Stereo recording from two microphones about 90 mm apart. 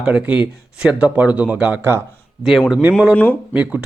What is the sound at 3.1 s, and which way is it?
Speech, 20° left (ahead or behind).